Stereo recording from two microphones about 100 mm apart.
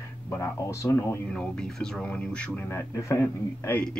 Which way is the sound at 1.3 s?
10° left (ahead or behind).